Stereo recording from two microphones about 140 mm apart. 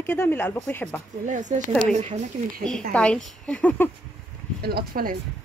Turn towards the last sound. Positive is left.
turn(degrees=-90)